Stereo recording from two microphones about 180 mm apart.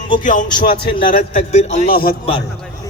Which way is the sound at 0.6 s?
60° left (ahead or behind).